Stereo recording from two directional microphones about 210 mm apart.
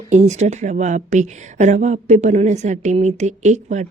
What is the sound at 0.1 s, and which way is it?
A woman's voice, 35° right (ahead or behind).